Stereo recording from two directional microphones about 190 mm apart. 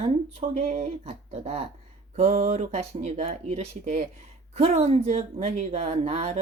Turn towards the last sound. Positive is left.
turn(degrees=-35)  # may be behind; listen again after turning